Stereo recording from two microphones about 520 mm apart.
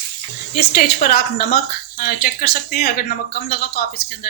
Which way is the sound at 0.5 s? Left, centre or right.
Centre.